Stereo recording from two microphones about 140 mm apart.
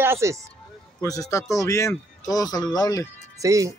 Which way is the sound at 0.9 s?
25° left (ahead or behind).